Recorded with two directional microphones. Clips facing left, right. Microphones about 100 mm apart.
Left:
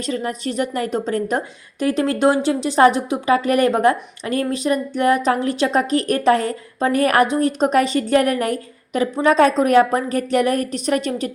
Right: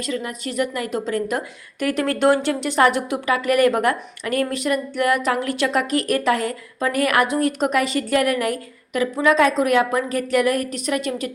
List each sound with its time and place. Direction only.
0.0 s a woman's voice: 35° left (ahead or behind)